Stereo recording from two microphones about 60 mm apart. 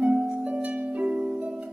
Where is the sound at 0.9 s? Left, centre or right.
Right.